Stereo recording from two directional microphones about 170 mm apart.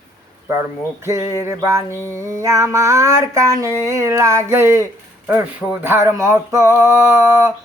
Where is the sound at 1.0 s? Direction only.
15° right (ahead or behind).